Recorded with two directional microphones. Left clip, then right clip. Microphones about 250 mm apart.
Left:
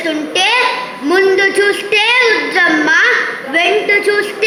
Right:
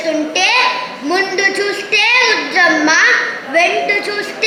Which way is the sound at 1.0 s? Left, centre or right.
Left.